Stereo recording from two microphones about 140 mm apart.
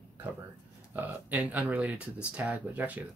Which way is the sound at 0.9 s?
10° right (ahead or behind).